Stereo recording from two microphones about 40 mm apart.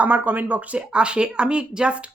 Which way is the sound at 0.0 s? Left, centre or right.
Right.